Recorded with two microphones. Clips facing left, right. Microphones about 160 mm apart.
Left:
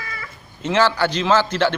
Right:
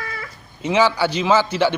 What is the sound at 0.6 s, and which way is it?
Speech, 10° right (ahead or behind).